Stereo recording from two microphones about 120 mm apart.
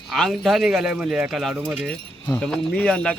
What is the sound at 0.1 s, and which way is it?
Speech, centre (ahead or behind).